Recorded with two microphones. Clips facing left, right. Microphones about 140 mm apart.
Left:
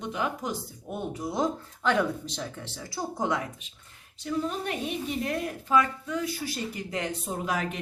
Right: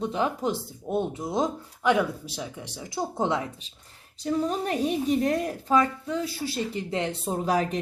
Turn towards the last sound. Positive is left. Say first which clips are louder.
# right 5 dB
turn(degrees=-35)  # may be behind; listen again after turning